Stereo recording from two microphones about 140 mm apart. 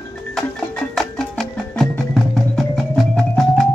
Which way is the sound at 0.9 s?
Centre (ahead or behind).